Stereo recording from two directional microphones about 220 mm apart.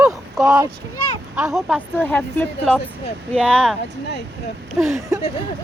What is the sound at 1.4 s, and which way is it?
Speech, 5° right (ahead or behind).